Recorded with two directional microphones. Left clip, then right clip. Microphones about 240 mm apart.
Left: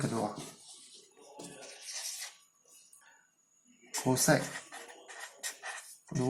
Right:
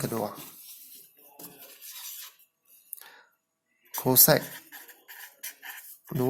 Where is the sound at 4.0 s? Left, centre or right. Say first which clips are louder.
Right 6 dB; right.